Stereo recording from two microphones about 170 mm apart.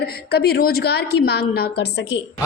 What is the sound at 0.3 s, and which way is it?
A woman's voice, 75° left (ahead or behind).